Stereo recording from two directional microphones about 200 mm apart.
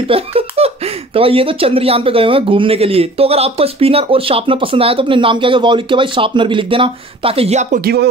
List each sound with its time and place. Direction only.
0.1 s speech: 30° right (ahead or behind)
7.8 s speech: 50° right (ahead or behind)